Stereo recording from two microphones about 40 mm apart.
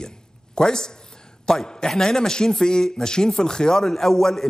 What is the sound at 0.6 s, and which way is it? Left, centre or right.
A man's voice, centre.